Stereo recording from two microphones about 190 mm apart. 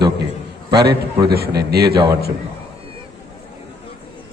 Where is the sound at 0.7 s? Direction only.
60° right (ahead or behind).